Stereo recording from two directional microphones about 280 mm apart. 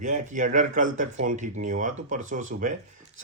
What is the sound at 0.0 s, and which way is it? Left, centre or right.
Speech, right.